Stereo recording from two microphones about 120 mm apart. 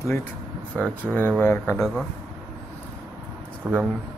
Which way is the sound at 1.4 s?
20° left (ahead or behind).